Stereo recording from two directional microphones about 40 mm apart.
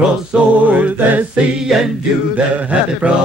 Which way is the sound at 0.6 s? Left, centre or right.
Right.